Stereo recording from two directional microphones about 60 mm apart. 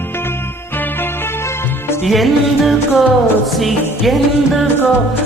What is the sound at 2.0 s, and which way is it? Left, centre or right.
Music, centre.